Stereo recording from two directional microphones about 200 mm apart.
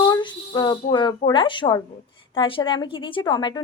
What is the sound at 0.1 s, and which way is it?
A woman's voice, 20° left (ahead or behind).